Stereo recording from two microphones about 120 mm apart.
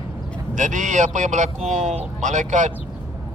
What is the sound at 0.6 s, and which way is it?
Speech, 90° right.